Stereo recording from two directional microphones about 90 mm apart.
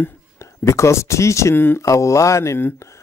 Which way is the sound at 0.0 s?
30° left (ahead or behind).